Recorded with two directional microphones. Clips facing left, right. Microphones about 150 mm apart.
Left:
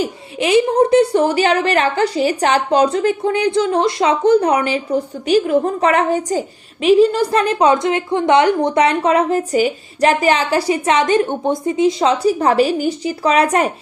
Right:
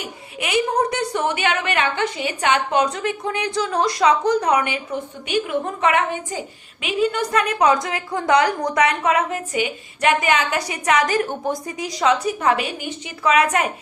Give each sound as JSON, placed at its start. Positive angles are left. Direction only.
{"t": 0.0, "sound": "a woman's voice", "side_deg": 30}